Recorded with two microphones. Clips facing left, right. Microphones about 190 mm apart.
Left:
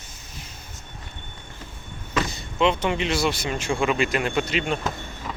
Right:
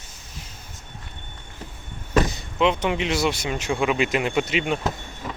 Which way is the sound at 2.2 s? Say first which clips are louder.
Right 1 dB; 15° right (ahead or behind).